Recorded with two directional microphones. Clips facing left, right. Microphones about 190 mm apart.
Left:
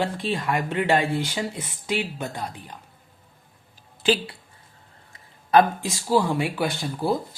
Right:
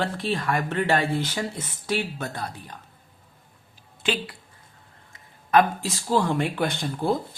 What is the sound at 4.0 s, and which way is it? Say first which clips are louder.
Speech: left 5 dB; 35° left (ahead or behind).